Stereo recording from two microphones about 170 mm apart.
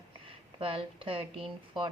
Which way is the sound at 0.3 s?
30° right (ahead or behind).